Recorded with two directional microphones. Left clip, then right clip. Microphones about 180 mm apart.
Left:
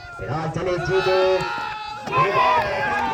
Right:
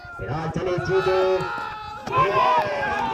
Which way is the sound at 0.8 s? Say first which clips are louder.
Left 2 dB; 65° right (ahead or behind).